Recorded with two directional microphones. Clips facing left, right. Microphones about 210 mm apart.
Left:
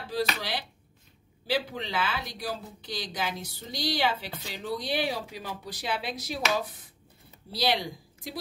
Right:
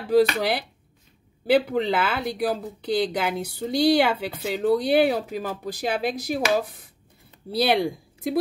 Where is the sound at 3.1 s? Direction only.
60° right (ahead or behind).